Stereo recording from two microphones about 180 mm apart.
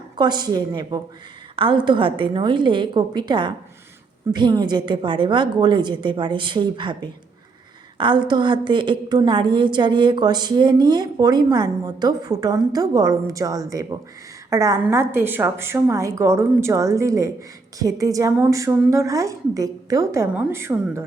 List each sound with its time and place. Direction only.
0.2 s a woman's voice: 25° right (ahead or behind)